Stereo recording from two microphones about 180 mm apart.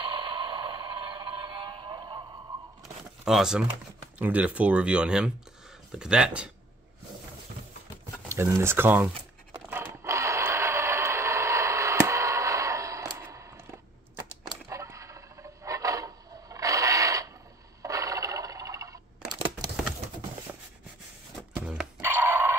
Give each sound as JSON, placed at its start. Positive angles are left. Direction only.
{"t": 0.0, "sound": "music", "side_deg": -30}
{"t": 3.3, "sound": "speech", "side_deg": -5}
{"t": 8.3, "sound": "crumpling", "side_deg": -15}
{"t": 14.7, "sound": "a sound", "side_deg": -15}
{"t": 17.8, "sound": "scrape", "side_deg": -20}
{"t": 21.5, "sound": "dog", "side_deg": -5}